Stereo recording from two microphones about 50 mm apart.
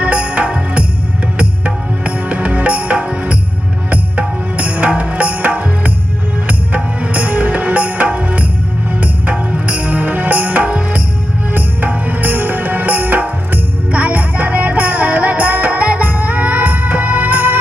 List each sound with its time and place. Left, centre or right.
0.0 s music: right
11.5 s music: right